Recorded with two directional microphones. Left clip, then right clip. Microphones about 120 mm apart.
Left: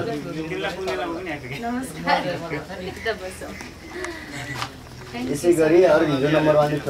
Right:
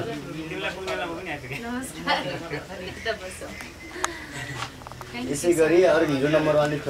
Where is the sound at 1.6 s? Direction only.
5° right (ahead or behind).